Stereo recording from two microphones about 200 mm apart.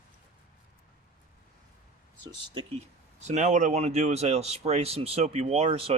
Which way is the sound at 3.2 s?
35° right (ahead or behind).